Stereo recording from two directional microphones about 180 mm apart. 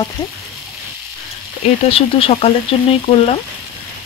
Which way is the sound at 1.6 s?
30° left (ahead or behind).